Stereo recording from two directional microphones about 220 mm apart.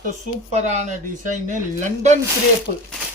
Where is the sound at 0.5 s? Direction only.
30° right (ahead or behind).